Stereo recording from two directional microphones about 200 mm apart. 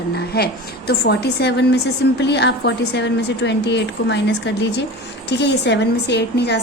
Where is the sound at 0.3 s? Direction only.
55° left (ahead or behind).